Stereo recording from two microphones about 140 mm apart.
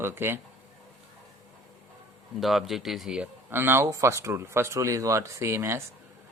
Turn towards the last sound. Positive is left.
turn(degrees=-20)  # may be behind; listen again after turning